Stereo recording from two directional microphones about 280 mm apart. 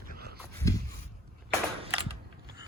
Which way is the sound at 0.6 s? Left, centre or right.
Centre.